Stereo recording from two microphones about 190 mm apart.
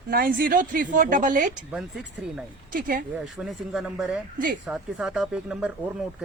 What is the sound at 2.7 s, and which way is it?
Speech, 50° right (ahead or behind).